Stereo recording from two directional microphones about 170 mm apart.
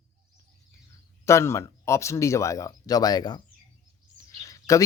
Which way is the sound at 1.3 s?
15° left (ahead or behind).